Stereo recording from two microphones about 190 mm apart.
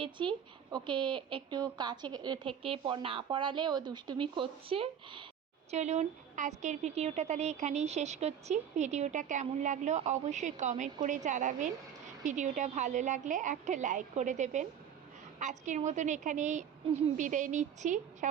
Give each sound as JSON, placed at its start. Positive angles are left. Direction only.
{"t": 0.0, "sound": "a woman's voice", "side_deg": -25}